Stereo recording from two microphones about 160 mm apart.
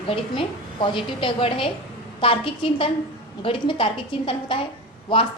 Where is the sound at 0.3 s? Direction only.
35° left (ahead or behind).